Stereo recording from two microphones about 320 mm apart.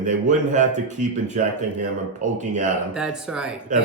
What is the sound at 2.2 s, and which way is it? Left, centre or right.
Speech, right.